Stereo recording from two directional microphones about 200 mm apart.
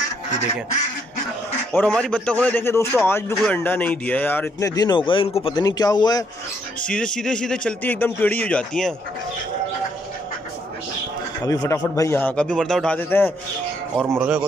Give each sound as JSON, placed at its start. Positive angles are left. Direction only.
{"t": 1.8, "sound": "a man's voice", "side_deg": 5}
{"t": 6.9, "sound": "speech", "side_deg": 5}
{"t": 11.4, "sound": "a man's voice", "side_deg": 20}
{"t": 14.0, "sound": "speech", "side_deg": -10}